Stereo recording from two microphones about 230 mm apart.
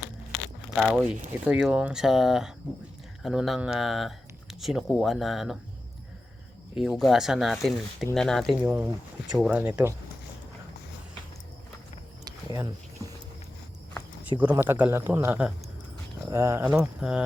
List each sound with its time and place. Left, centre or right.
0.8 s speech: centre
6.7 s speech: centre
8.6 s speech: centre
12.2 s a sound: centre
14.3 s speech: centre